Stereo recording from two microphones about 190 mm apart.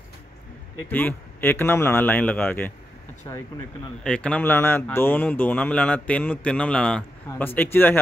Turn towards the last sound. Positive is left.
turn(degrees=10)  # may be behind; listen again after turning